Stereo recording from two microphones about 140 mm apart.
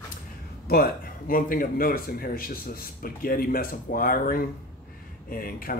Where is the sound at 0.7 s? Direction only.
90° left.